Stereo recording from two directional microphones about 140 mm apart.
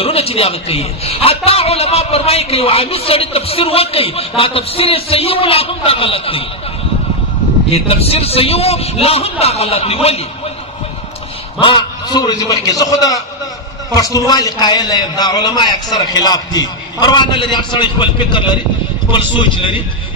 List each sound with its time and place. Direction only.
0.0 s a man's voice: 45° left (ahead or behind)
7.7 s a man's voice: 45° left (ahead or behind)
11.6 s a man's voice: 30° left (ahead or behind)